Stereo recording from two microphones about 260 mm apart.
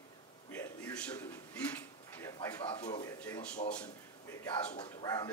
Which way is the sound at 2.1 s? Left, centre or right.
Centre.